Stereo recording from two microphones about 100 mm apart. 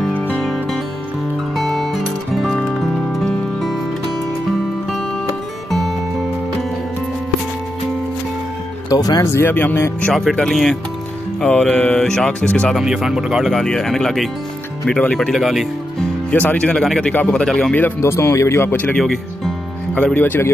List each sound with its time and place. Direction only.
0.4 s music: 5° left (ahead or behind)
5.7 s music: centre (ahead or behind)
8.8 s speech: 40° left (ahead or behind)
9.3 s speech: 25° left (ahead or behind)
10.1 s speech: 5° left (ahead or behind)
12.7 s speech: 5° right (ahead or behind)
16.3 s speech: 15° left (ahead or behind)
17.7 s speech: 20° left (ahead or behind)
18.9 s speech: 5° left (ahead or behind)
20.2 s speech: 20° left (ahead or behind)